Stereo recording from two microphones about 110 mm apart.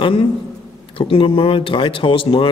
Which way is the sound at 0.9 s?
55° left (ahead or behind).